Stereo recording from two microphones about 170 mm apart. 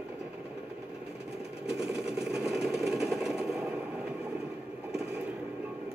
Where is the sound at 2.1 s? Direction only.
5° right (ahead or behind).